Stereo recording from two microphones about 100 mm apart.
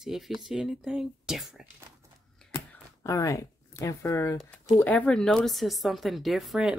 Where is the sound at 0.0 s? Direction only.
5° right (ahead or behind).